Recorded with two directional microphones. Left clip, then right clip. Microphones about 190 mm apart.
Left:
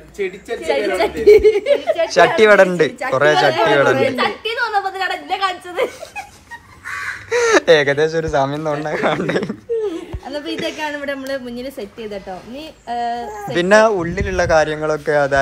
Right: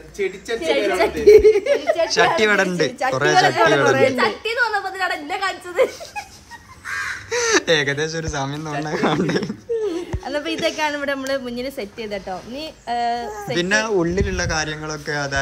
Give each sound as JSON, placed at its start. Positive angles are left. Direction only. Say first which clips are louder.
{"t": 0.2, "sound": "a woman's voice", "louder": "even", "side_deg": -5}
{"t": 4.2, "sound": "a sound", "louder": "even", "side_deg": 45}
{"t": 7.2, "sound": "a woman's voice", "louder": "left 6 dB", "side_deg": -10}
{"t": 13.9, "sound": "speech", "louder": "right 1 dB", "side_deg": -25}
{"t": 14.3, "sound": "a woman's voice", "louder": "left 9 dB", "side_deg": -10}